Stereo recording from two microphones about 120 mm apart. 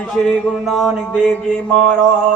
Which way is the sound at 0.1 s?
5° left (ahead or behind).